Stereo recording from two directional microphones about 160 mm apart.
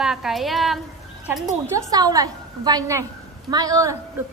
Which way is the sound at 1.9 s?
25° right (ahead or behind).